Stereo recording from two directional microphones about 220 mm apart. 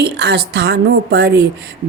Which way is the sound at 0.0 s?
50° right (ahead or behind).